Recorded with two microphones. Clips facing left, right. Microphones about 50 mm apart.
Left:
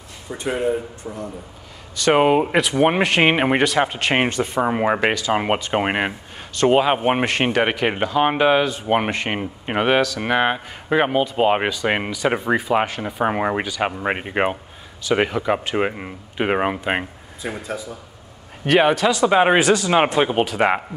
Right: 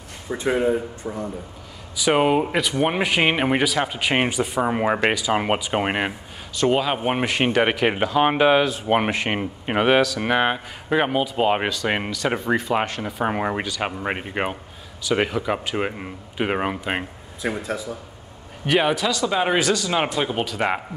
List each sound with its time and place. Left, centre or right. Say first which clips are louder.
0.3 s a man's voice: right 1 dB; centre
2.1 s speech: left 3 dB; centre
7.2 s speech: left 1 dB; centre
17.4 s speech: right 3 dB; centre
18.8 s speech: left 5 dB; centre
19.0 s speech: left 6 dB; left